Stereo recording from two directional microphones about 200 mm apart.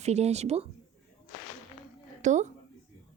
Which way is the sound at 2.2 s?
35° right (ahead or behind).